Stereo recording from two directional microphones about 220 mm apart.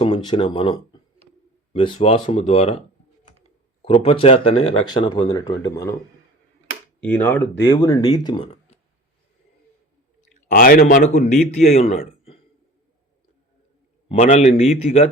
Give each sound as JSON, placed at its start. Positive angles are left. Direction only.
{"t": 0.0, "sound": "speech", "side_deg": 25}
{"t": 3.8, "sound": "speech", "side_deg": 25}
{"t": 7.0, "sound": "speech", "side_deg": 10}
{"t": 10.5, "sound": "a man's voice", "side_deg": 40}
{"t": 14.1, "sound": "speech", "side_deg": 30}